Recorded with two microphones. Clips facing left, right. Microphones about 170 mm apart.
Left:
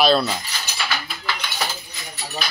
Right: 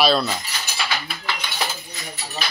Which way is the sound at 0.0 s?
Centre (ahead or behind).